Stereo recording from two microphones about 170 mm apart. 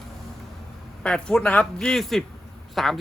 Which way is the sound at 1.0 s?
5° left (ahead or behind).